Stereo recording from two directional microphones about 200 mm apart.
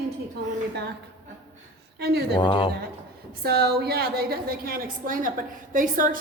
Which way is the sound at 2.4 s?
25° left (ahead or behind).